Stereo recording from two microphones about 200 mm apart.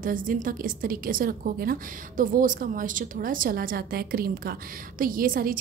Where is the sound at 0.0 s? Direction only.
45° right (ahead or behind).